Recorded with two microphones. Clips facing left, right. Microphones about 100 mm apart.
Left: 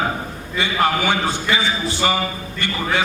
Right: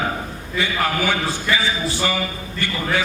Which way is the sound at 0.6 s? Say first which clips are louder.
Left 2 dB; 20° left (ahead or behind).